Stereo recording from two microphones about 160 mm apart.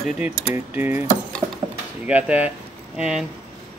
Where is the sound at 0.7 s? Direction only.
10° right (ahead or behind).